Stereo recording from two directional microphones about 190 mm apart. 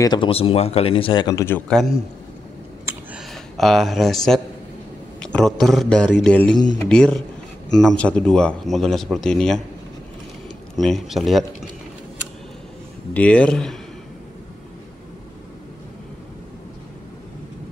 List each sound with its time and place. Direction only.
0.0 s speech: 25° left (ahead or behind); by 1.9 s 5° left (ahead or behind)
2.8 s a sound: 15° right (ahead or behind)
3.2 s speech: centre (ahead or behind)
10.8 s speech: centre (ahead or behind)
13.1 s speech: 5° left (ahead or behind)